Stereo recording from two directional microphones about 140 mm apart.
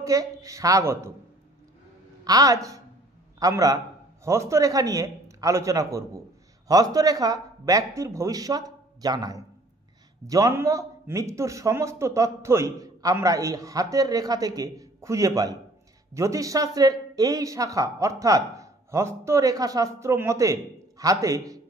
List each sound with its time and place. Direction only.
0.0 s a man's voice: 25° right (ahead or behind)
2.2 s a man's voice: 25° right (ahead or behind)